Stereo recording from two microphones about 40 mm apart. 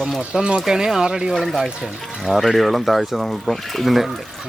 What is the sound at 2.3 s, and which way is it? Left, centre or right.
Speech, centre.